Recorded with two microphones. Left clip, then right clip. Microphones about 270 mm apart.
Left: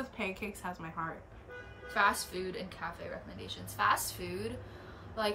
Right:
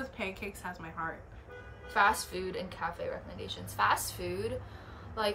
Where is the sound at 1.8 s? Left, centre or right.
Centre.